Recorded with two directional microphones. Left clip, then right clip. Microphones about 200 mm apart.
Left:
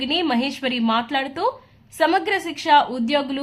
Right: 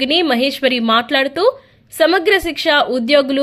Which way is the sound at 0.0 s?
20° right (ahead or behind).